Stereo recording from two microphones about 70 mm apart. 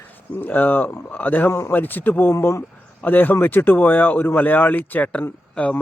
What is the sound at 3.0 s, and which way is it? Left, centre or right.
A man's voice, left.